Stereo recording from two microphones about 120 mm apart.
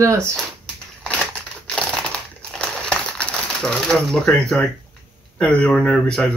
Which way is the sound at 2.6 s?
5° left (ahead or behind).